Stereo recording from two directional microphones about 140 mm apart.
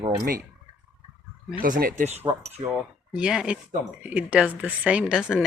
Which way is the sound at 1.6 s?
85° right.